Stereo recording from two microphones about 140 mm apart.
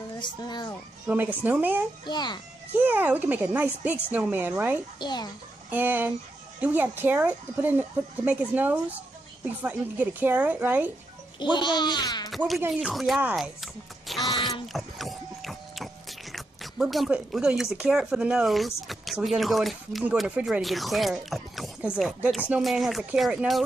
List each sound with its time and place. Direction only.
0.2 s speech: 30° left (ahead or behind)
1.0 s speech: 10° right (ahead or behind)
2.0 s speech: 30° left (ahead or behind)
2.7 s speech: 15° right (ahead or behind)
5.0 s speech: 30° left (ahead or behind)
5.7 s speech: 15° right (ahead or behind)
11.5 s speech: 35° left (ahead or behind)
12.4 s speech: 5° right (ahead or behind)
13.4 s music: centre (ahead or behind)
14.7 s speech: centre (ahead or behind)